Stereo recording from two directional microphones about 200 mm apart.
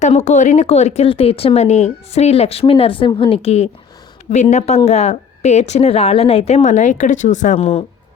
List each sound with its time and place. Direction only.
0.0 s speech: 35° left (ahead or behind)